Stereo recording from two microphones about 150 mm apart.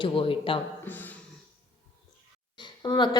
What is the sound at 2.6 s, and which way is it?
Speech, 30° left (ahead or behind).